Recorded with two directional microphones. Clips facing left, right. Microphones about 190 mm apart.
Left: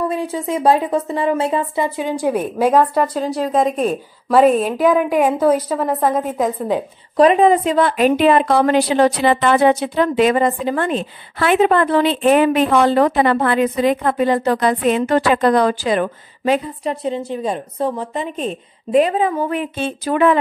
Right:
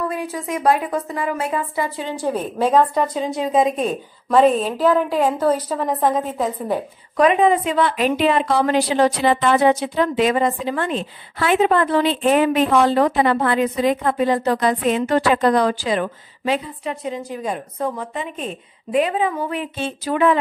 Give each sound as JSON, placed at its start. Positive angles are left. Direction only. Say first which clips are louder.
{"t": 0.1, "sound": "a woman's voice", "louder": "left 4 dB", "side_deg": 25}
{"t": 2.0, "sound": "a woman's voice", "louder": "left 4 dB", "side_deg": 15}
{"t": 7.2, "sound": "a woman's voice", "louder": "left 3 dB", "side_deg": 35}
{"t": 16.9, "sound": "speech", "louder": "left 5 dB", "side_deg": 30}